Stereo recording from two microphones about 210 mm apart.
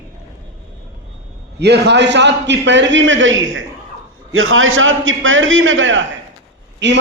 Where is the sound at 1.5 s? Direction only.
50° right (ahead or behind).